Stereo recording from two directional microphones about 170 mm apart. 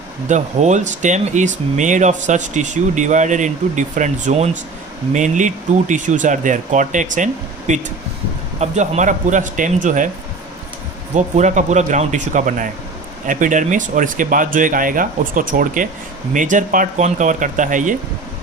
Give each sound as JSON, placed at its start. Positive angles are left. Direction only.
{"t": 0.3, "sound": "speech", "side_deg": -45}
{"t": 11.1, "sound": "speech", "side_deg": -45}